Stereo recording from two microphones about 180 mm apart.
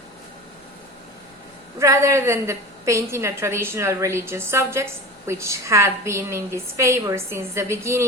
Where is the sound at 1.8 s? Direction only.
15° right (ahead or behind).